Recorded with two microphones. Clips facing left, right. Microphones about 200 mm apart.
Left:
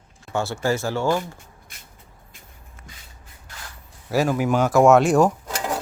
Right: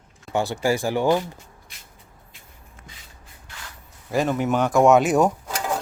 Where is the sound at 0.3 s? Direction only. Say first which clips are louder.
Right 1 dB; 15° right (ahead or behind).